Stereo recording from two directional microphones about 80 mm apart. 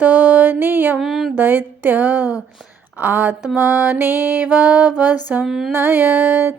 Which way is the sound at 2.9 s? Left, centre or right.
Centre.